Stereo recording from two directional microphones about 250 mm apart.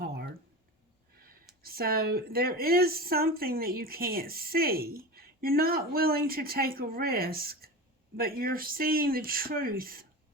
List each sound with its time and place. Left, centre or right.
1.6 s speech: right